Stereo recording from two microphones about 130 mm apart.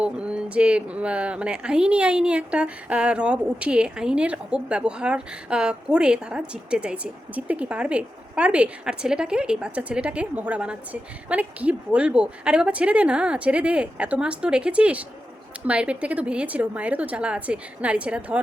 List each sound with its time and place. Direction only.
0.0 s a woman's voice: 10° right (ahead or behind)